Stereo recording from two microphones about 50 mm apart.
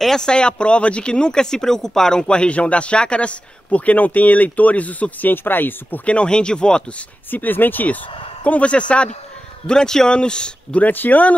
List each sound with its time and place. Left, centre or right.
0.0 s speech: centre; by 5.3 s left
5.3 s speech: left
6.0 s speech: left
7.2 s speech: left
8.5 s speech: left
9.7 s a man's voice: centre
10.8 s speech: left